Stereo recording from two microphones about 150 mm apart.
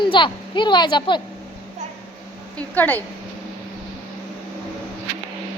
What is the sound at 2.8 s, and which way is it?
Speech, 10° left (ahead or behind).